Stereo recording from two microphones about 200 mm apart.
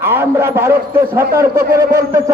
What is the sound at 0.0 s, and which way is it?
A man's voice, 10° right (ahead or behind).